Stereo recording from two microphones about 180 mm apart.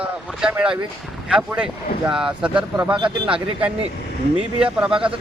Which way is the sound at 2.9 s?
25° right (ahead or behind).